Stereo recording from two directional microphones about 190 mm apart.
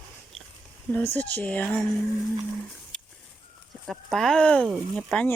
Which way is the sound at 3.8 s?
Centre (ahead or behind).